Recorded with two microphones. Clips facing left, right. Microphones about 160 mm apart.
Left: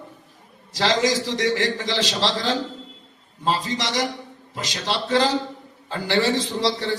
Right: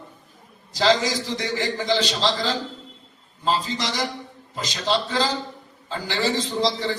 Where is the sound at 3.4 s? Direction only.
70° left (ahead or behind).